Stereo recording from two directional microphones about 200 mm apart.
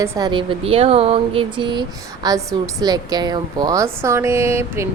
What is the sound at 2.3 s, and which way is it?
A woman's voice, 20° right (ahead or behind).